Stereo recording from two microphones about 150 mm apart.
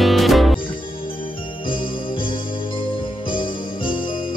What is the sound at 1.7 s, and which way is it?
Jingle bell, 35° left (ahead or behind).